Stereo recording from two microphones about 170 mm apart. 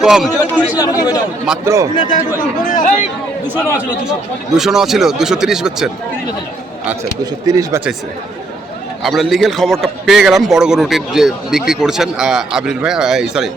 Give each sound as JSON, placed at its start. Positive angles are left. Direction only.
{"t": 0.0, "sound": "a man's voice", "side_deg": -5}
{"t": 0.8, "sound": "speech", "side_deg": 20}
{"t": 1.6, "sound": "a man's voice", "side_deg": -15}
{"t": 2.0, "sound": "speech", "side_deg": 45}
{"t": 4.5, "sound": "a man's voice", "side_deg": 0}
{"t": 7.4, "sound": "speech", "side_deg": -20}
{"t": 9.0, "sound": "a man's voice", "side_deg": 0}